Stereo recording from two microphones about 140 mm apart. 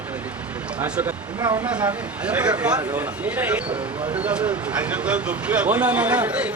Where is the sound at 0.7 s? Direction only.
10° right (ahead or behind).